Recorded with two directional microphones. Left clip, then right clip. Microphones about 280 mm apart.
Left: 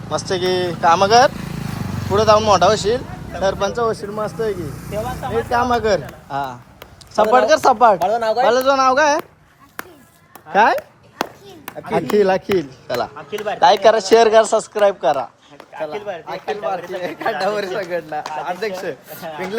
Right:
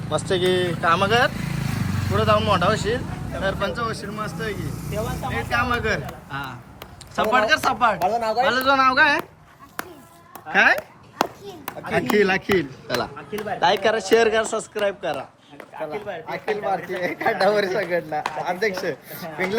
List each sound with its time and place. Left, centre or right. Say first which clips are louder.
0.4 s speech: left 6 dB; centre
1.5 s vehicle: even; left
2.1 s speech: left 7 dB; centre
3.8 s speech: left 7 dB; centre
5.7 s speech: left 7 dB; centre
8.0 s speech: left 4 dB; left
8.4 s speech: left 4 dB; centre
9.8 s a sound: even; centre
10.5 s speech: left 3 dB; centre; by 16.3 s left
16.3 s speech: left 1 dB; centre